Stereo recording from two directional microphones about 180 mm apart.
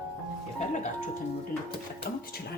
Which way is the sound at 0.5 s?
40° left (ahead or behind).